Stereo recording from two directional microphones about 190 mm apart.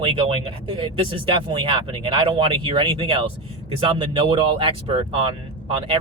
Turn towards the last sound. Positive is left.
turn(degrees=-30)  # may be behind; listen again after turning